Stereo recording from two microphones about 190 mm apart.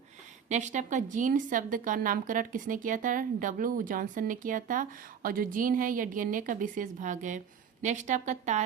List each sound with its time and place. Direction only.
0.4 s speech: 40° right (ahead or behind)